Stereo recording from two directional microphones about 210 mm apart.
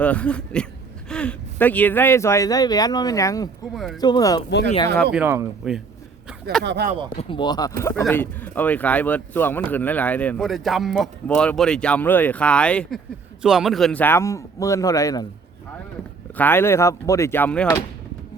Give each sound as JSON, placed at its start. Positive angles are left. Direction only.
{"t": 0.0, "sound": "speech", "side_deg": 5}
{"t": 5.1, "sound": "speech", "side_deg": -10}
{"t": 6.7, "sound": "speech", "side_deg": -50}
{"t": 7.2, "sound": "speech", "side_deg": 25}
{"t": 16.4, "sound": "speech", "side_deg": 10}